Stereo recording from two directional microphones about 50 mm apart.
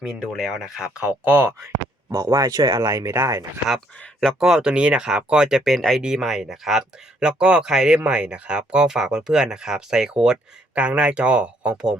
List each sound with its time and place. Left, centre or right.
0.0 s speech: centre
1.0 s speech: right
1.6 s speech: right
4.4 s speech: centre
6.2 s speech: centre
7.2 s speech: centre